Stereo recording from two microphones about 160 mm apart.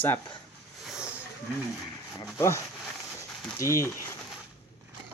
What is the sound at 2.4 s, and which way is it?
Speech, 15° left (ahead or behind).